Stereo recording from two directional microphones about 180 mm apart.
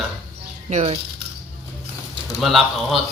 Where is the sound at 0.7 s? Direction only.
40° right (ahead or behind).